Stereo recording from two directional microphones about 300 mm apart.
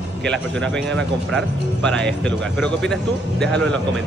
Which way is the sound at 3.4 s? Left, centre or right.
Centre.